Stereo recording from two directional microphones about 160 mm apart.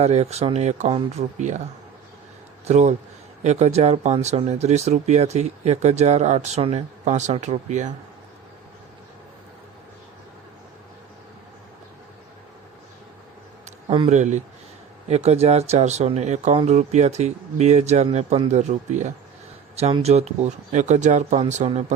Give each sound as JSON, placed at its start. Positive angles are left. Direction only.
{"t": 0.0, "sound": "speech", "side_deg": -40}
{"t": 2.6, "sound": "a man's voice", "side_deg": -45}
{"t": 14.1, "sound": "speech", "side_deg": -45}